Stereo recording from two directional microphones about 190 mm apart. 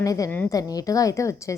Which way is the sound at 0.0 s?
15° left (ahead or behind).